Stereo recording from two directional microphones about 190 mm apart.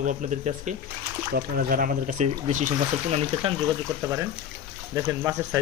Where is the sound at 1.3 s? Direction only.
50° right (ahead or behind).